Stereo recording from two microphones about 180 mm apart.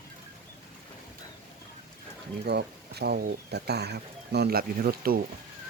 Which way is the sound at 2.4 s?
65° right (ahead or behind).